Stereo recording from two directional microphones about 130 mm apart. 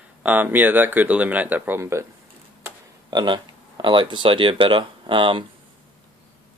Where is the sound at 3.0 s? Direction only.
35° right (ahead or behind).